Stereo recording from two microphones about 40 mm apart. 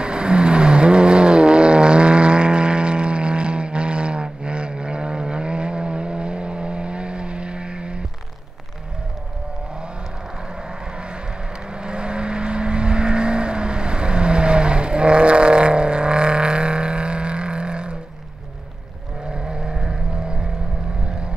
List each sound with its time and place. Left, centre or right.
0.0 s vehicle: right
11.7 s vehicle: right
19.3 s vehicle: right